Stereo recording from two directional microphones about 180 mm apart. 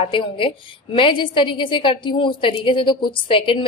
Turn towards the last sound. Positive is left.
turn(degrees=30)  # may be behind; listen again after turning